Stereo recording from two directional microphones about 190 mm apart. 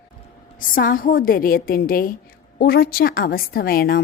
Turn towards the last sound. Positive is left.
turn(degrees=55)  # may be behind; listen again after turning